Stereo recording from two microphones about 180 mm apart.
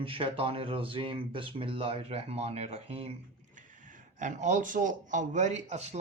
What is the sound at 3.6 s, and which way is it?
Speech, 45° right (ahead or behind).